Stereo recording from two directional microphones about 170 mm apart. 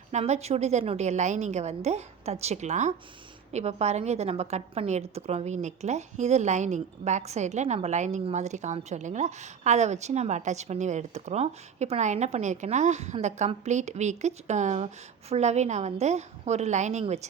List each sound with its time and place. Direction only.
0.1 s a woman's voice: 40° right (ahead or behind)